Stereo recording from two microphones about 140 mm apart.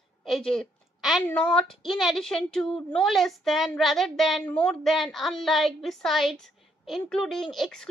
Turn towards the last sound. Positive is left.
turn(degrees=0)  # may be behind; listen again after turning